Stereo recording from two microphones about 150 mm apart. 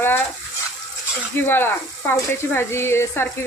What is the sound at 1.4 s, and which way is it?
Speech, 15° left (ahead or behind).